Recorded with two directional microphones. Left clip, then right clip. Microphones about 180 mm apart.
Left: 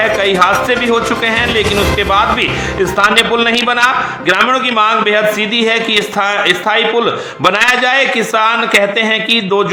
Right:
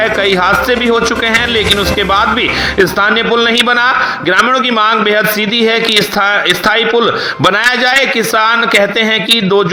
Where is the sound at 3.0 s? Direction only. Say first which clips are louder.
Left 4 dB; 30° right (ahead or behind).